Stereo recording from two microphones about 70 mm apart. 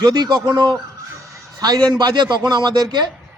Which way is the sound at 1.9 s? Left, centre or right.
Right.